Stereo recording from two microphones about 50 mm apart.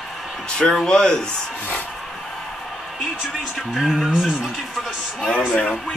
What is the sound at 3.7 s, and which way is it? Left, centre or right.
Speech, centre.